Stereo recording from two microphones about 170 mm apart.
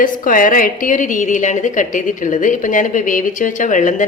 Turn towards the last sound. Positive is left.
turn(degrees=50)  # may be behind; listen again after turning